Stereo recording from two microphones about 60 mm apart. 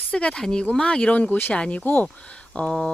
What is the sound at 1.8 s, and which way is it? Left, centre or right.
Speech, left.